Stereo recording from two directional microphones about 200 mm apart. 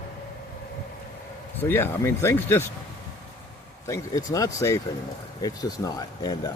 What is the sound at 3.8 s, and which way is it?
Speech, 15° left (ahead or behind).